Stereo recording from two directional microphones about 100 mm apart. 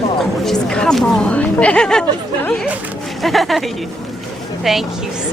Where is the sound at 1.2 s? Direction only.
10° left (ahead or behind).